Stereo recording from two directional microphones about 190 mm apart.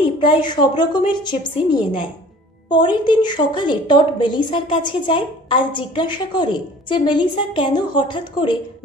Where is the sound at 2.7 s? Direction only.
25° left (ahead or behind).